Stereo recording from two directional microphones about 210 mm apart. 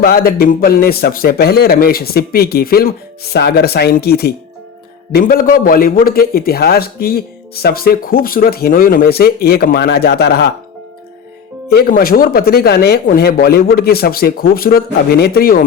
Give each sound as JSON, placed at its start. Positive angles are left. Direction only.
{"t": 0.0, "sound": "a man's voice", "side_deg": 45}
{"t": 11.7, "sound": "a man's voice", "side_deg": 45}